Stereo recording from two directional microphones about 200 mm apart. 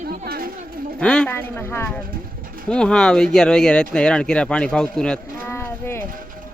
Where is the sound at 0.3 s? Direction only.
45° right (ahead or behind).